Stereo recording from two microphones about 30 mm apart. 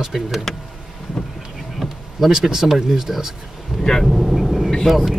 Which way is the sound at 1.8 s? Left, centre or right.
Centre.